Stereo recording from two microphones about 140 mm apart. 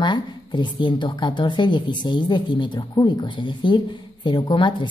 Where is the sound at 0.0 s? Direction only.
35° left (ahead or behind).